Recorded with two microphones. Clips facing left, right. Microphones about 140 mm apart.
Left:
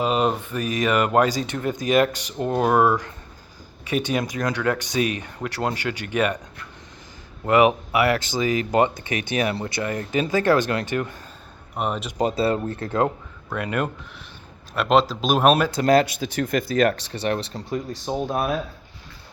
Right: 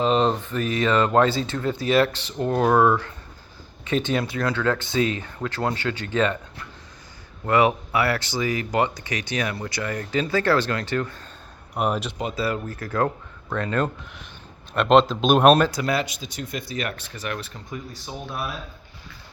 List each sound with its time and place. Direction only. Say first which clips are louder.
0.0 s speech: right 1 dB; 10° left (ahead or behind)
7.4 s speech: left 2 dB; 20° left (ahead or behind)
11.7 s speech: right 2 dB; centre (ahead or behind)
12.1 s speech: left 5 dB; 35° left (ahead or behind)
13.5 s speech: right 1 dB; 10° left (ahead or behind)
15.8 s speech: left 7 dB; 45° left (ahead or behind)
18.0 s speech: left 8 dB; 45° left (ahead or behind)